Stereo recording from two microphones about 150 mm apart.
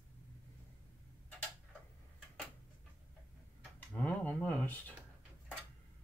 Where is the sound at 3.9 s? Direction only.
10° left (ahead or behind).